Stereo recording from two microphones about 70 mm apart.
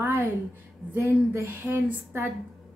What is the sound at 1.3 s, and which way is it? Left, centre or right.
Speech, right.